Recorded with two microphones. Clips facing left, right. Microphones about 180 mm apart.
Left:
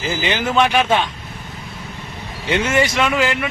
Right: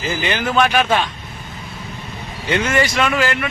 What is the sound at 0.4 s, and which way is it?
Speech, 20° left (ahead or behind).